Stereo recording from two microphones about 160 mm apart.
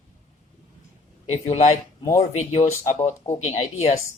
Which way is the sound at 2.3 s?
45° left (ahead or behind).